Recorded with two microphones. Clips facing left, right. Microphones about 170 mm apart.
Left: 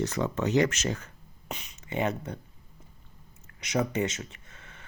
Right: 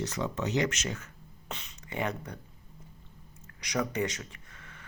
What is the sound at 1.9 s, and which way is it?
Speech, 25° left (ahead or behind).